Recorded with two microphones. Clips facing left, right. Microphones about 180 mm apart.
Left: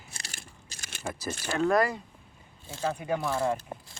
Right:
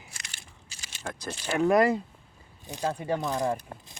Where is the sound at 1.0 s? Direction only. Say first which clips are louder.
Left 2 dB; 5° left (ahead or behind).